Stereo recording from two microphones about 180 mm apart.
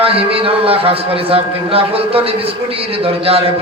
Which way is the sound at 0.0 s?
30° right (ahead or behind).